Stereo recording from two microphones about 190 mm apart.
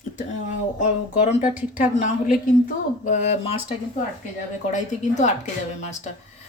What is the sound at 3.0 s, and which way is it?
Speech, 40° left (ahead or behind).